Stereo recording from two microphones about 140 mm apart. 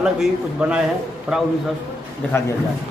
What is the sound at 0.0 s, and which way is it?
Speech, 5° right (ahead or behind).